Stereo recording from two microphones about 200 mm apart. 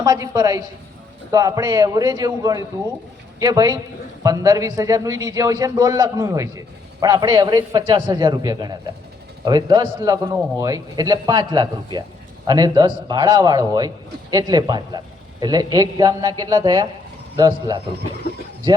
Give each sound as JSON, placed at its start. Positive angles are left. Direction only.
{"t": 0.0, "sound": "a man's voice", "side_deg": -20}